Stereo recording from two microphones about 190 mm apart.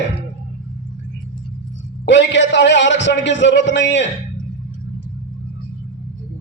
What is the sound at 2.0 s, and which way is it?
A man's voice, 70° left (ahead or behind).